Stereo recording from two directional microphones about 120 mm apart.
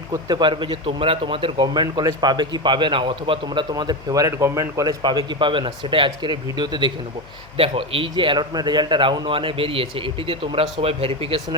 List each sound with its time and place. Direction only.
0.3 s speech: 40° right (ahead or behind)
7.5 s a man's voice: 50° right (ahead or behind)